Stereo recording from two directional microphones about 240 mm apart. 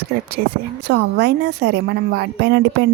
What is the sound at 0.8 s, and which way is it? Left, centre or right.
A woman's voice, right.